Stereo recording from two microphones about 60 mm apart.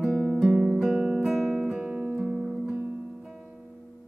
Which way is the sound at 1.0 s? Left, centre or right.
Centre.